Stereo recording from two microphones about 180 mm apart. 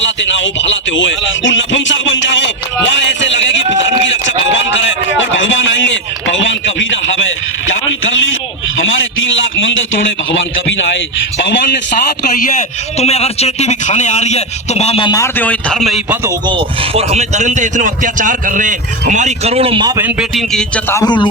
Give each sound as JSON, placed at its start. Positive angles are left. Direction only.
{"t": 0.0, "sound": "speech", "side_deg": 90}
{"t": 13.0, "sound": "a man's voice", "side_deg": 35}
{"t": 15.1, "sound": "speech", "side_deg": 15}
{"t": 16.2, "sound": "speech", "side_deg": -25}
{"t": 20.0, "sound": "speech", "side_deg": -10}